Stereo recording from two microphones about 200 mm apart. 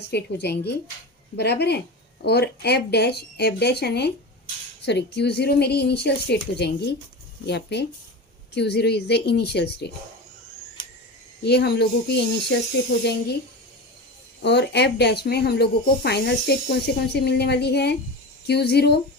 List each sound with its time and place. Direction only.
0.1 s speech: 55° left (ahead or behind)
11.4 s speech: 55° left (ahead or behind)
14.4 s speech: 60° left (ahead or behind)